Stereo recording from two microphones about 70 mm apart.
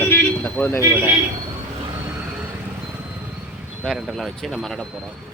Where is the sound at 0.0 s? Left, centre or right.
Left.